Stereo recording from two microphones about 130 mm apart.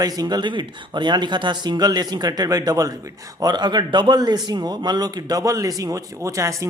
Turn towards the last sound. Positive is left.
turn(degrees=-25)  # may be behind; listen again after turning